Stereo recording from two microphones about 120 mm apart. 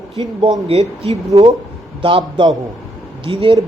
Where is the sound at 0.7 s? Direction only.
55° right (ahead or behind).